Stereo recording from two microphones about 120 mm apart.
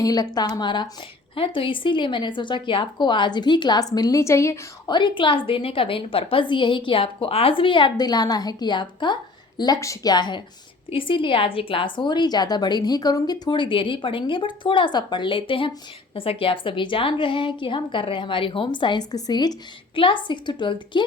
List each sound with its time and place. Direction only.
0.0 s speech: 30° left (ahead or behind)
4.9 s a woman's voice: 40° left (ahead or behind)